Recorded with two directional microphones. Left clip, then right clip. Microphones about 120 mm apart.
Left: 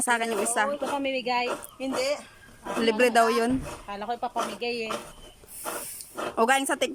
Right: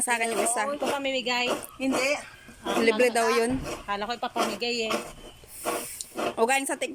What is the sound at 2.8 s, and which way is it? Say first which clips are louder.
Speech: left 2 dB; 15° left (ahead or behind).